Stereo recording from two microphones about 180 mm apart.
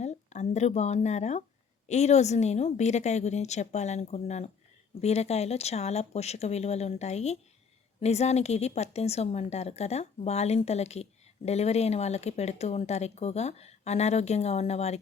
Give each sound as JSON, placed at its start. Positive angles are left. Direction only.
{"t": 0.0, "sound": "a woman's voice", "side_deg": 40}